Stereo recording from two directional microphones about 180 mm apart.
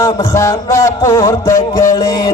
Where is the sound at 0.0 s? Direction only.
20° left (ahead or behind).